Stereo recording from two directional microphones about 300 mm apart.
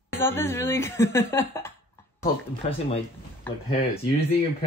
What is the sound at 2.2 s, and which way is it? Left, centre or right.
Speech, centre.